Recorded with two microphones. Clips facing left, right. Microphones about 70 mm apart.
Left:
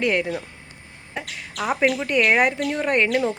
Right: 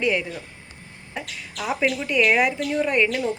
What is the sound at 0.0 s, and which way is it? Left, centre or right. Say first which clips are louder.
Speech: left 2 dB; left.